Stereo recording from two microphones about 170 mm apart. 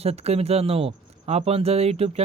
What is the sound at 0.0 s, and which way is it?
Speech, 35° right (ahead or behind).